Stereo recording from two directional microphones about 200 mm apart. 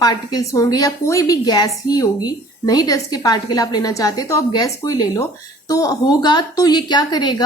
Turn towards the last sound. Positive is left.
turn(degrees=20)  # may be behind; listen again after turning